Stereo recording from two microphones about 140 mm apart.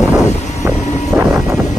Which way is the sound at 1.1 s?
15° right (ahead or behind).